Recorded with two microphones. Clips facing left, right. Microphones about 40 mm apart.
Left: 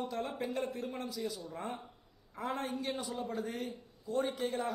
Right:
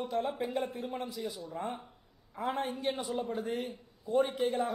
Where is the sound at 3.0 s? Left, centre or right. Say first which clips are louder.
Right 4 dB; centre.